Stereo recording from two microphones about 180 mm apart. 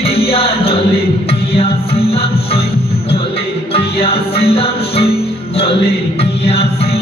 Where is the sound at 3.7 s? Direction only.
30° left (ahead or behind).